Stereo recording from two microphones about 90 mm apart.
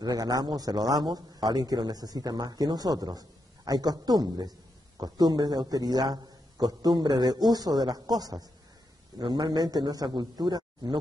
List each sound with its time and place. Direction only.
0.0 s a man's voice: 45° right (ahead or behind)